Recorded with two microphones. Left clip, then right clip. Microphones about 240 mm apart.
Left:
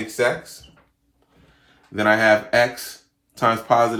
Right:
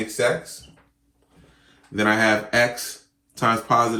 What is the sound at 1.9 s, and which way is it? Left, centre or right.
Speech, left.